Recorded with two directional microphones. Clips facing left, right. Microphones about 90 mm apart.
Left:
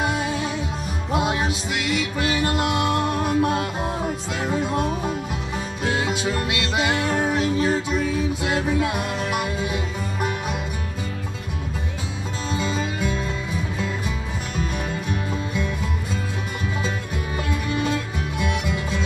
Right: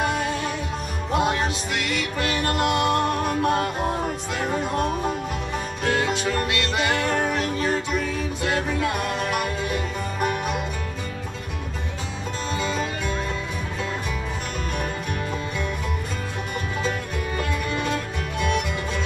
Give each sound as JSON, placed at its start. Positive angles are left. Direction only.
{"t": 0.0, "sound": "music", "side_deg": 15}
{"t": 12.4, "sound": "music", "side_deg": 15}
{"t": 17.4, "sound": "music", "side_deg": 20}